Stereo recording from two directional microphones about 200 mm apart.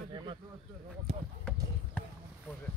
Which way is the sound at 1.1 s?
35° right (ahead or behind).